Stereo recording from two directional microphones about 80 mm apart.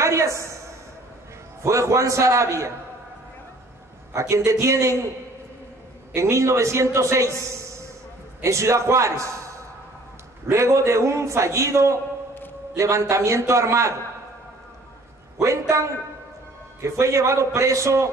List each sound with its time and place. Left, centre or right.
0.0 s a sound: right
1.6 s a man's voice: right
4.1 s a man's voice: right
6.1 s a man's voice: right
8.4 s a man's voice: right
10.4 s a man's voice: right
15.3 s a man's voice: right